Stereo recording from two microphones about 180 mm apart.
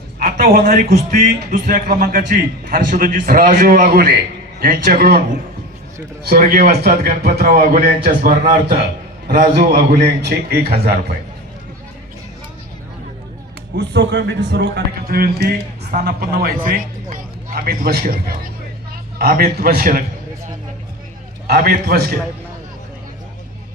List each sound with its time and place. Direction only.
0.5 s a man's voice: 45° right (ahead or behind)
8.3 s a man's voice: 35° right (ahead or behind)
9.2 s a man's voice: 50° right (ahead or behind)
13.7 s a man's voice: 75° right (ahead or behind); by 20.1 s 55° right (ahead or behind)
21.4 s a man's voice: 60° right (ahead or behind)